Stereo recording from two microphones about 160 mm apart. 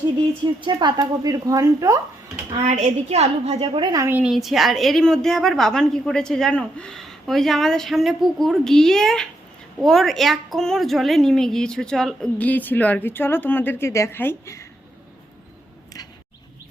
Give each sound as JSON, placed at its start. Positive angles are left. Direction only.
{"t": 0.6, "sound": "a woman's voice", "side_deg": -30}
{"t": 2.5, "sound": "a woman's voice", "side_deg": -45}
{"t": 4.0, "sound": "a woman's voice", "side_deg": -10}